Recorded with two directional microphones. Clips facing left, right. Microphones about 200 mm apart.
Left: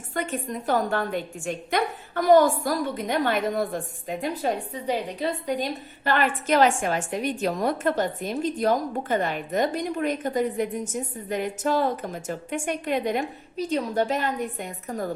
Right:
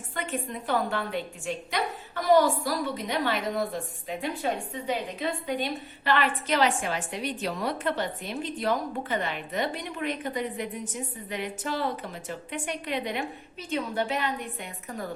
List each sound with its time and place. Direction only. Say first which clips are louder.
0.1 s a woman's voice: left 4 dB; 45° left (ahead or behind)